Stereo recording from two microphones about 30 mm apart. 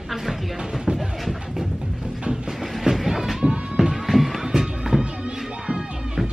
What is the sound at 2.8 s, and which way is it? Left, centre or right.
Train, centre.